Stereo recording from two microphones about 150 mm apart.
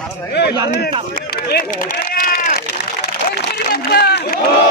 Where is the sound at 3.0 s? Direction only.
90° left.